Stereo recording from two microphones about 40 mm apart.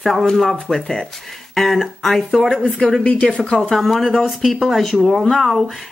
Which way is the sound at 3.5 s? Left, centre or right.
Centre.